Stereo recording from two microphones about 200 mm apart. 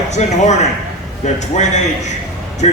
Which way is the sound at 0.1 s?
35° left (ahead or behind).